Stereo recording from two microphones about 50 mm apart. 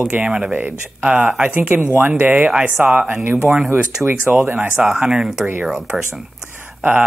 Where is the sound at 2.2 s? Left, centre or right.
Right.